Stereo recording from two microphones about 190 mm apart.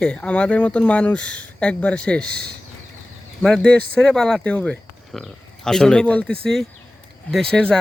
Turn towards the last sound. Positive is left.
turn(degrees=5)  # may be behind; listen again after turning